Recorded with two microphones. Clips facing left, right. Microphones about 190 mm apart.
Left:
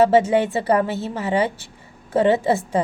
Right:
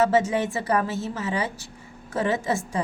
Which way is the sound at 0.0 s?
30° left (ahead or behind).